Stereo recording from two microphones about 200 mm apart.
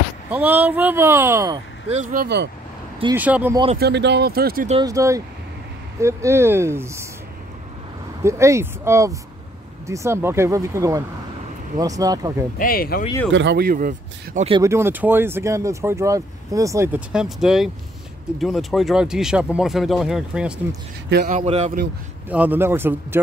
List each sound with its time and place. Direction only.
0.3 s speech: 10° right (ahead or behind)
1.9 s speech: 35° right (ahead or behind)
2.2 s speech: 60° right (ahead or behind)
3.2 s speech: 10° right (ahead or behind)
3.8 s speech: 60° right (ahead or behind)
4.8 s speech: 15° right (ahead or behind)
8.2 s speech: 15° right (ahead or behind)
12.5 s speech: 45° left (ahead or behind)
13.3 s speech: 60° right (ahead or behind); by 14.5 s 40° right (ahead or behind)
14.6 s speech: 15° right (ahead or behind)
21.3 s speech: 35° right (ahead or behind)
22.3 s speech: 10° right (ahead or behind)